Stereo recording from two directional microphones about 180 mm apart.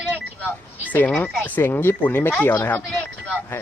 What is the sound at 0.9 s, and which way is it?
Speech, 10° left (ahead or behind).